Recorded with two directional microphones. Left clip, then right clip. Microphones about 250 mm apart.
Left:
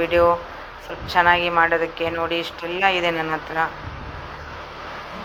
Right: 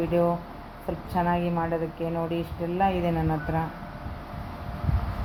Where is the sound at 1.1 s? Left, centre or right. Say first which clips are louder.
Left 11 dB; centre.